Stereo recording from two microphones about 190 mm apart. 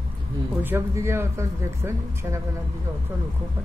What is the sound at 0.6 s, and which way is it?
Speech, 15° right (ahead or behind).